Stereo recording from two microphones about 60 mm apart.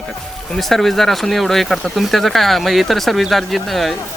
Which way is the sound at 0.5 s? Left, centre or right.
Centre.